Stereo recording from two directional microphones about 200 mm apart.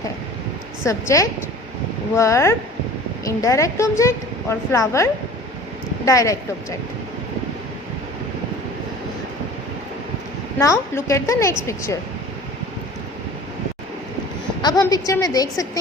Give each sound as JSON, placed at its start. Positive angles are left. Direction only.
{"t": 0.9, "sound": "a woman's voice", "side_deg": 15}
{"t": 10.6, "sound": "a woman's voice", "side_deg": 15}
{"t": 14.6, "sound": "a woman's voice", "side_deg": 20}